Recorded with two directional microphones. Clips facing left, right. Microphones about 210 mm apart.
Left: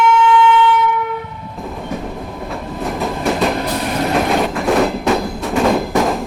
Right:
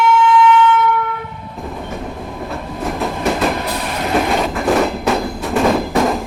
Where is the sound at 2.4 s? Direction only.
Centre (ahead or behind).